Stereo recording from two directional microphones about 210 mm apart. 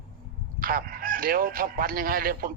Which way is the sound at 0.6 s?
45° right (ahead or behind).